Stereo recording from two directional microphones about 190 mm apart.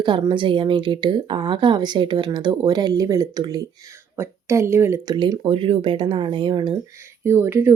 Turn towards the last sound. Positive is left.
turn(degrees=-10)  # may be behind; listen again after turning